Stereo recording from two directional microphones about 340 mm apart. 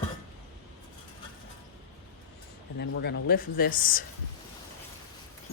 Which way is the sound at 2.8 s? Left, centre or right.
Left.